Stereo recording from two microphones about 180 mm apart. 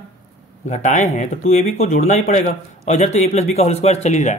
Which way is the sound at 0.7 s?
45° left (ahead or behind).